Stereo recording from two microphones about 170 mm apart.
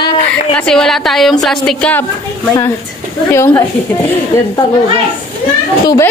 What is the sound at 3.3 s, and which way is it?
Speech, 15° left (ahead or behind).